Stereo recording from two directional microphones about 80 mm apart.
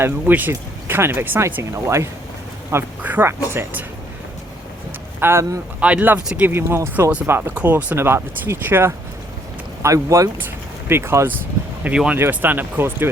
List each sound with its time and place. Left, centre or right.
0.0 s speech: right
3.0 s speech: right
3.2 s speech: right
5.2 s speech: right
5.8 s speech: centre
6.5 s speech: right
7.5 s speech: centre
7.9 s speech: right
9.8 s speech: right
10.8 s speech: right